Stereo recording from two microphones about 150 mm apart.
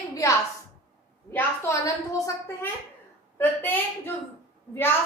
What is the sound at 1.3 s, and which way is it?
A woman's voice, 15° left (ahead or behind).